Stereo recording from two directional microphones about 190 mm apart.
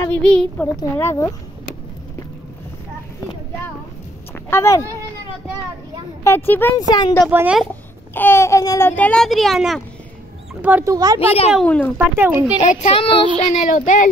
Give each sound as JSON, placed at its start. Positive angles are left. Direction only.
{"t": 0.0, "sound": "a child's voice", "side_deg": 5}
{"t": 4.5, "sound": "a child's voice", "side_deg": 15}
{"t": 6.2, "sound": "a child's voice", "side_deg": 10}
{"t": 7.2, "sound": "speech", "side_deg": -5}
{"t": 8.1, "sound": "a child's voice", "side_deg": 10}
{"t": 11.1, "sound": "child singing", "side_deg": 30}
{"t": 11.6, "sound": "a child's voice", "side_deg": 5}
{"t": 12.2, "sound": "speech", "side_deg": -10}
{"t": 12.9, "sound": "child singing", "side_deg": 25}
{"t": 13.4, "sound": "child singing", "side_deg": 40}